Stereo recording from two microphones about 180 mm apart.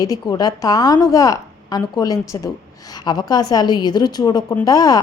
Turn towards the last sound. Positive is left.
turn(degrees=20)  # may be behind; listen again after turning